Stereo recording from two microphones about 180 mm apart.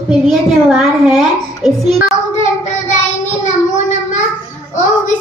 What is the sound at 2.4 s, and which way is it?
Child singing, 40° left (ahead or behind).